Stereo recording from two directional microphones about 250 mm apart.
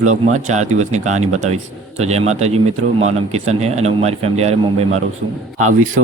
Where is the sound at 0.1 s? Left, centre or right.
Right.